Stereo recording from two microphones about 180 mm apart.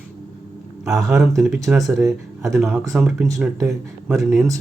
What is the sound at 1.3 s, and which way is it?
Speech, centre (ahead or behind).